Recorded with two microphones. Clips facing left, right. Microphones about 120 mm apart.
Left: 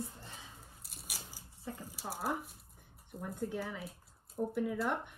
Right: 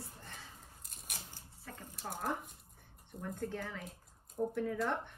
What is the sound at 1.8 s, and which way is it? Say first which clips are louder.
Speech: even; 5° left (ahead or behind).